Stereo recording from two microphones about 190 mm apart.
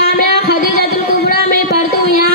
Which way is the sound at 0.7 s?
55° right (ahead or behind).